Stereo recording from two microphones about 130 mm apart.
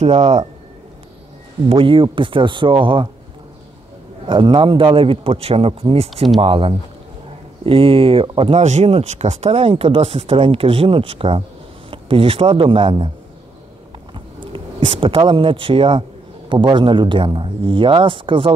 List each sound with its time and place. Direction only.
0.0 s speech: 55° right (ahead or behind)
1.7 s speech: 40° right (ahead or behind)
4.3 s speech: 40° right (ahead or behind)
14.1 s speech: 40° right (ahead or behind)